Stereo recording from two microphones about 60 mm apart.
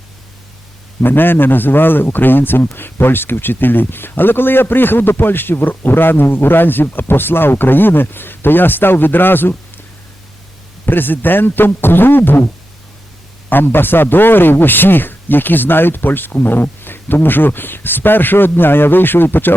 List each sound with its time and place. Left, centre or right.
1.0 s a man's voice: left
10.8 s a man's voice: left
13.5 s a man's voice: left